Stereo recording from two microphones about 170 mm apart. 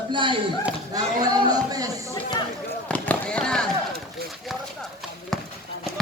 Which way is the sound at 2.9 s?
5° left (ahead or behind).